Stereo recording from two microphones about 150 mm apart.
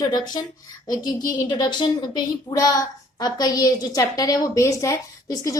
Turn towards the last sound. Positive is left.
turn(degrees=20)  # may be behind; listen again after turning